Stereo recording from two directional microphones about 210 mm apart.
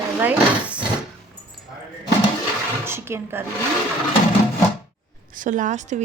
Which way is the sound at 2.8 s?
10° right (ahead or behind).